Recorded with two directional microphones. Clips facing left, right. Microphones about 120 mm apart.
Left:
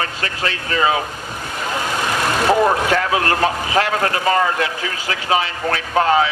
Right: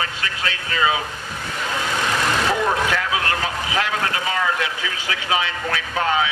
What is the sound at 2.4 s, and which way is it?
A man's voice, 45° left (ahead or behind).